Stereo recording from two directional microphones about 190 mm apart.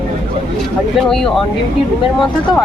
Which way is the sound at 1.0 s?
Centre (ahead or behind).